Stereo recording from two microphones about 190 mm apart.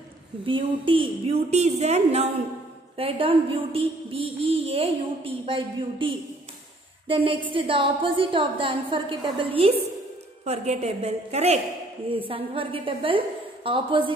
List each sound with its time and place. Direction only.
0.5 s a woman's voice: 30° right (ahead or behind)